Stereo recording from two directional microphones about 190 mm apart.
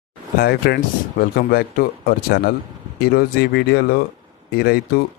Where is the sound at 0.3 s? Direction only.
55° left (ahead or behind).